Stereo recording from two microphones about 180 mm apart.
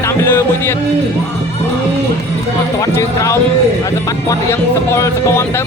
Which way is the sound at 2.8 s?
15° left (ahead or behind).